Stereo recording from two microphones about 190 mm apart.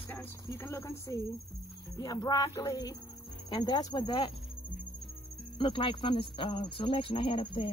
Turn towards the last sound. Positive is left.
turn(degrees=30)  # may be behind; listen again after turning